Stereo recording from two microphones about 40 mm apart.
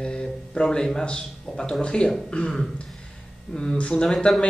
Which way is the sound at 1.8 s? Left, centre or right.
Left.